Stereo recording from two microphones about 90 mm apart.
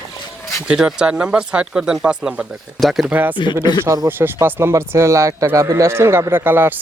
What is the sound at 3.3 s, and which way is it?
Speech, 60° left (ahead or behind).